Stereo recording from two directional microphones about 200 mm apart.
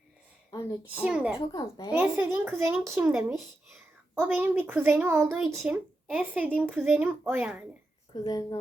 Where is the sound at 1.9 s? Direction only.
10° right (ahead or behind).